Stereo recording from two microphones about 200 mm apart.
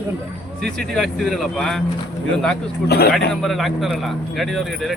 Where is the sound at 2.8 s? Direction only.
50° left (ahead or behind).